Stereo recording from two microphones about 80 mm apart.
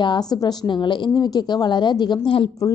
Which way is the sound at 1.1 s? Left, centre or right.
Left.